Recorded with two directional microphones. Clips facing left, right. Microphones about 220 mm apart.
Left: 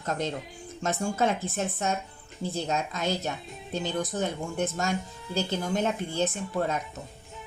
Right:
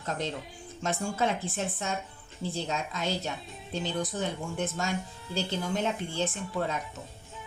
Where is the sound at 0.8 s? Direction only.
45° left (ahead or behind).